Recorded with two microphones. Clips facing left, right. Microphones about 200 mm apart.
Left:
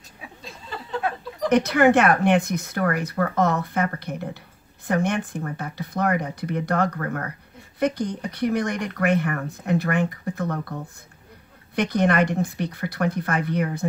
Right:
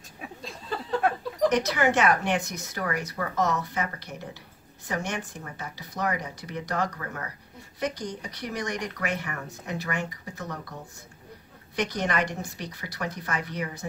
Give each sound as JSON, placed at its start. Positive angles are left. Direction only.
{"t": 1.5, "sound": "speech", "side_deg": 55}